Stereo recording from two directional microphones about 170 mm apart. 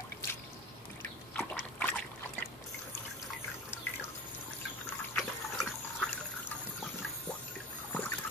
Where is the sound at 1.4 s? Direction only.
10° left (ahead or behind).